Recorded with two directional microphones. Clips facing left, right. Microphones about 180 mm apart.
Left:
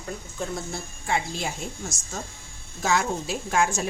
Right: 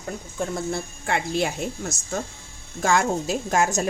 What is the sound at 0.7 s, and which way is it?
Speech, 60° right (ahead or behind).